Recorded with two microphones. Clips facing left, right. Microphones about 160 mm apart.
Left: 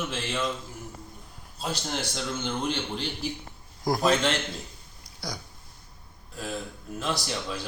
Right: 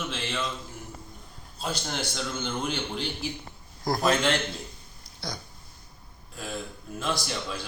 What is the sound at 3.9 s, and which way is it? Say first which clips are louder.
Speech: even; centre (ahead or behind).